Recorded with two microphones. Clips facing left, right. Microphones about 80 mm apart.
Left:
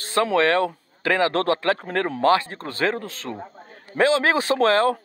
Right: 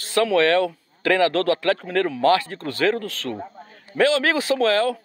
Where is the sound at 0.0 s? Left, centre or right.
Left.